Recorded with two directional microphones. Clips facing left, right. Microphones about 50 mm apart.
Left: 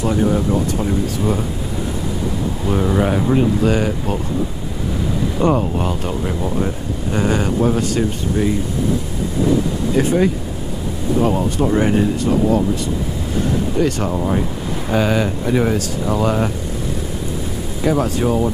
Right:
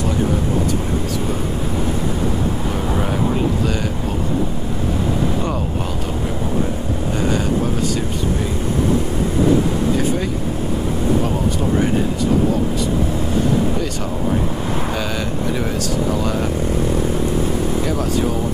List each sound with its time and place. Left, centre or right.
3.6 s speech: left
5.4 s speech: left
7.2 s speech: left
9.9 s speech: left
11.2 s speech: left
13.7 s speech: left
15.0 s speech: left
17.8 s speech: left